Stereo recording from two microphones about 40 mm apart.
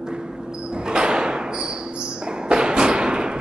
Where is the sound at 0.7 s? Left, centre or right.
Right.